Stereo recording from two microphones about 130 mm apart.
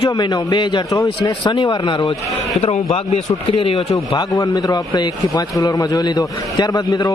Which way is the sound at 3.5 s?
45° left (ahead or behind).